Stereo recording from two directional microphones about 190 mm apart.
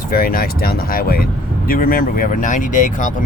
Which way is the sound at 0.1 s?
50° left (ahead or behind).